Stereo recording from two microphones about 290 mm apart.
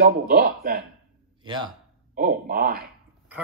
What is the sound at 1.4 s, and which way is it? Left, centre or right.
Speech, centre.